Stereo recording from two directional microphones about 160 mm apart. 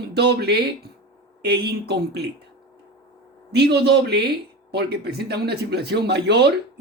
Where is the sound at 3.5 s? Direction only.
90° right.